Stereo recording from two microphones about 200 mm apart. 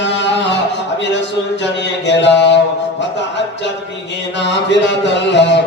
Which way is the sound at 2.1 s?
60° left (ahead or behind).